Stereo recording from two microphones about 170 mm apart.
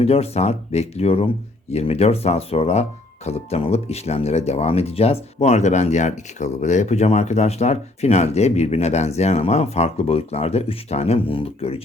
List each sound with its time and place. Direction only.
0.0 s speech: 35° left (ahead or behind)